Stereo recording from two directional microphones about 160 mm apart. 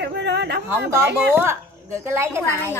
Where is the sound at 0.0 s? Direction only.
90° right.